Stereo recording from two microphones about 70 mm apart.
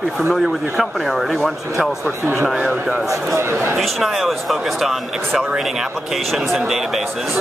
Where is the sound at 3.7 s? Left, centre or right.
Centre.